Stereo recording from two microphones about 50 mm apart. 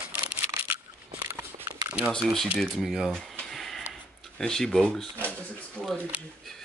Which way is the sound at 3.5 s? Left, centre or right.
Centre.